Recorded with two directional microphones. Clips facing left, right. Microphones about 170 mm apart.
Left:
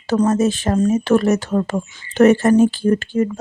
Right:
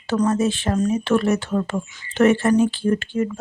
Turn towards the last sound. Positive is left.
turn(degrees=40)  # may be behind; listen again after turning